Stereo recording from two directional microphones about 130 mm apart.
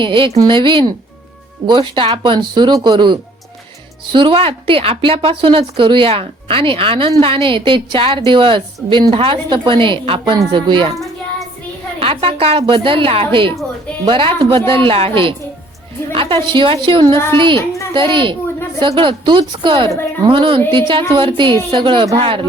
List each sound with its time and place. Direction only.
0.0 s a woman's voice: 40° right (ahead or behind)
11.9 s a woman's voice: 45° right (ahead or behind)
17.6 s speech: 25° left (ahead or behind)
17.9 s a woman's voice: 40° right (ahead or behind)